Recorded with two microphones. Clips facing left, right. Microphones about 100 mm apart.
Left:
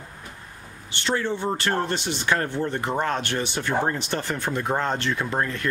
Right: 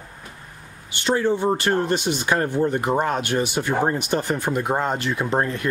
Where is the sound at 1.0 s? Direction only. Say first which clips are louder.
Right 5 dB; 15° right (ahead or behind).